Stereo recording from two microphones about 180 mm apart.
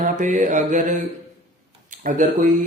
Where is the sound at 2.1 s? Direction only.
50° right (ahead or behind).